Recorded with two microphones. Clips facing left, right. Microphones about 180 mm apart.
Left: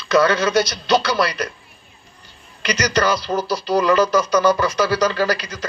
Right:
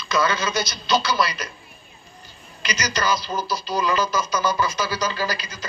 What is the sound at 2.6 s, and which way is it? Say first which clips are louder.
Speech: left 7 dB; 70° left (ahead or behind).